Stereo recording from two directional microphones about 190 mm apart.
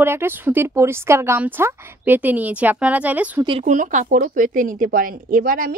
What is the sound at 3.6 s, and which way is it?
Speech, 40° right (ahead or behind).